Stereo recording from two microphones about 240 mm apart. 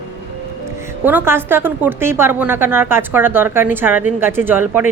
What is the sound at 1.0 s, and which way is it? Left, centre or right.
A woman's voice, centre.